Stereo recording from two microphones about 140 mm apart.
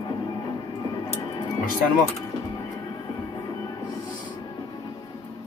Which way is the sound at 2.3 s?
30° left (ahead or behind).